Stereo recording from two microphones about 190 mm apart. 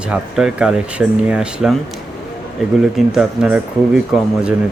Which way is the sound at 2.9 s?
5° right (ahead or behind).